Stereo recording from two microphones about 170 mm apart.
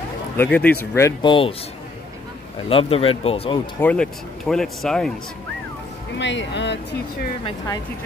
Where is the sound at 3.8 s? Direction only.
5° left (ahead or behind).